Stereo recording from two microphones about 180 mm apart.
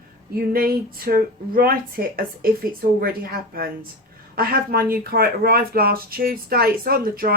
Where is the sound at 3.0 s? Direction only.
55° right (ahead or behind).